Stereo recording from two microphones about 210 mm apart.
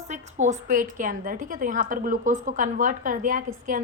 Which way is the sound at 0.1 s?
35° right (ahead or behind).